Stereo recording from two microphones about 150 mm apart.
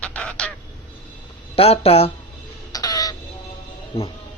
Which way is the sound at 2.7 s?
25° left (ahead or behind).